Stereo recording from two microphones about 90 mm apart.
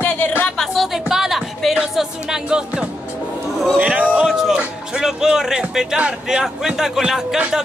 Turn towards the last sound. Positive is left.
turn(degrees=-5)  # may be behind; listen again after turning